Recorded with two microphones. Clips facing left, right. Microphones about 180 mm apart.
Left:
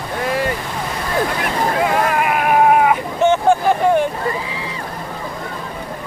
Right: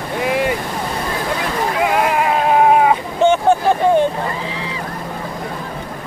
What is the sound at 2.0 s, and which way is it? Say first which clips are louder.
Vehicle: right 1 dB; 20° right (ahead or behind).